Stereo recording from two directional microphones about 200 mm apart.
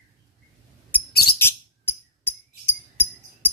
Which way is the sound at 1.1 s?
50° left (ahead or behind).